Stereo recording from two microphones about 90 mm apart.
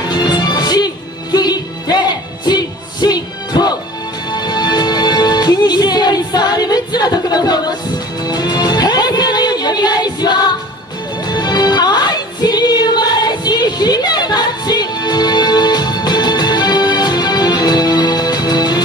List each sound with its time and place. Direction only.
0.1 s music: 50° left (ahead or behind)